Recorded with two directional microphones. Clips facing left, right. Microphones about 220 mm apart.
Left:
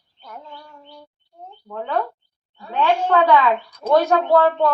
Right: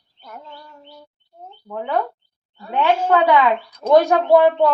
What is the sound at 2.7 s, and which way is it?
A woman's voice, 20° right (ahead or behind).